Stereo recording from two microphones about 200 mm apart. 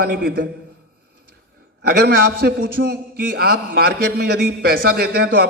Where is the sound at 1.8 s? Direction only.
50° right (ahead or behind).